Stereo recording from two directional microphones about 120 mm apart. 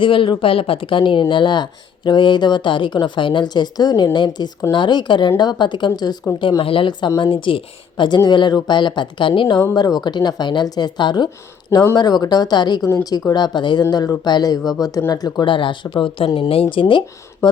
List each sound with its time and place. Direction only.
0.0 s speech: 45° left (ahead or behind)
12.8 s speech: 25° left (ahead or behind); by 17.0 s 45° left (ahead or behind)